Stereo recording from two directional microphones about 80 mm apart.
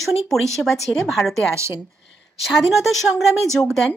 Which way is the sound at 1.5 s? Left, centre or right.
Right.